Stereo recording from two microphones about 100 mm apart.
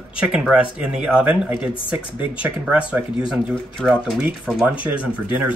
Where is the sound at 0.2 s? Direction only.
10° right (ahead or behind).